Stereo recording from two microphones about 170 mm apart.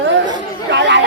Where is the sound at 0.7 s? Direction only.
90° right.